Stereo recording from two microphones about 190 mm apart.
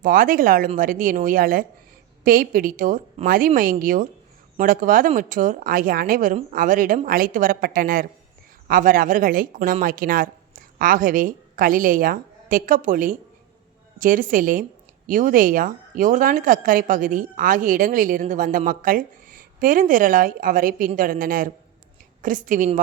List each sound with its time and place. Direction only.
0.0 s a woman's voice: 45° right (ahead or behind)